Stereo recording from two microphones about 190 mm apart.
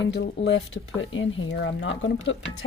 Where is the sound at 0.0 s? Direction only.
65° left (ahead or behind).